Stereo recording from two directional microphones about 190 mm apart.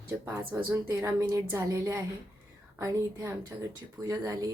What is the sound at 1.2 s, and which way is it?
Speech, 15° right (ahead or behind).